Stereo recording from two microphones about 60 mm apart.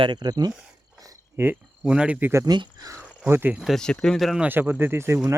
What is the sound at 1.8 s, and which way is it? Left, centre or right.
Speech, centre.